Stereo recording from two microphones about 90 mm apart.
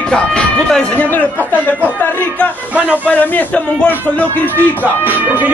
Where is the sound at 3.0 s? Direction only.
15° left (ahead or behind).